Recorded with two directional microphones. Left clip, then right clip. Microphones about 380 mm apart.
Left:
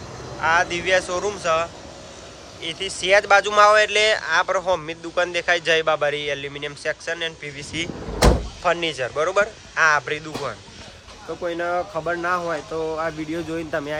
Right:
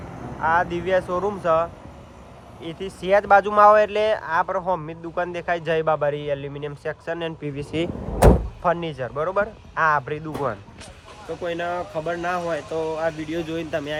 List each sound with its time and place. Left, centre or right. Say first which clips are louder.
0.4 s speech: left 2 dB; centre